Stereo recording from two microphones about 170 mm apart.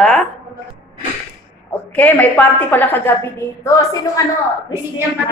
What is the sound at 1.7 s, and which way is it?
A woman's voice, 10° left (ahead or behind).